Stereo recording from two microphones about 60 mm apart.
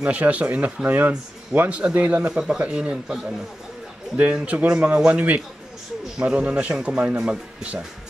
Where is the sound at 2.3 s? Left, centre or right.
Centre.